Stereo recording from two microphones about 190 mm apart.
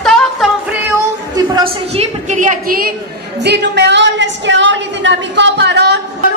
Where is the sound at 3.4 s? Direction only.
60° right (ahead or behind).